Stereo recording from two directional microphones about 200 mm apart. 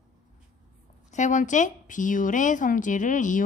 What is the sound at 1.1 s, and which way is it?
A woman's voice, 35° left (ahead or behind).